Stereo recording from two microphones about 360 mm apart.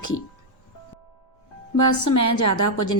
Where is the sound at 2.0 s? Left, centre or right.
Left.